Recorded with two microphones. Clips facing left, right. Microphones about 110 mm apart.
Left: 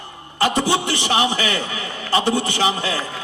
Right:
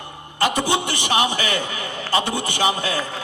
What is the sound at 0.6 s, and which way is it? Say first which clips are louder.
Speech: left 2 dB; 20° right (ahead or behind).